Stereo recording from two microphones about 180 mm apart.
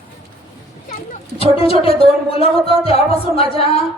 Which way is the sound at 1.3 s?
35° left (ahead or behind).